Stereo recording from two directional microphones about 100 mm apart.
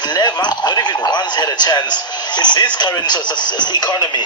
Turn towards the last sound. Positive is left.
turn(degrees=45)  # may be behind; listen again after turning